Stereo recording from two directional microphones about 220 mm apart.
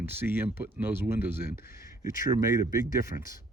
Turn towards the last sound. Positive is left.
turn(degrees=-15)  # may be behind; listen again after turning